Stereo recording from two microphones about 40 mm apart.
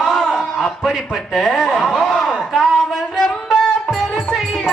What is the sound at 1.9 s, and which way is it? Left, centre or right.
Speech, centre.